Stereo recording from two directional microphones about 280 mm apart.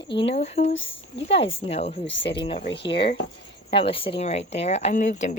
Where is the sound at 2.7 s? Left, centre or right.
Left.